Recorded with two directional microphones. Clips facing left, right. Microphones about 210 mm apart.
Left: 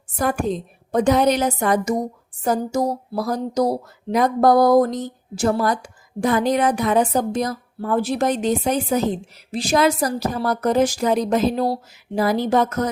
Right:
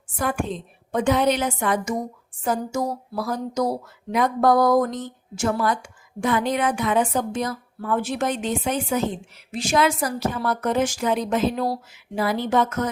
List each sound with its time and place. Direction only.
0.2 s a woman's voice: 40° left (ahead or behind)